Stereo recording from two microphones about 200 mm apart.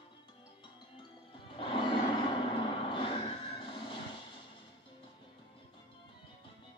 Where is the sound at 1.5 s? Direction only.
25° left (ahead or behind).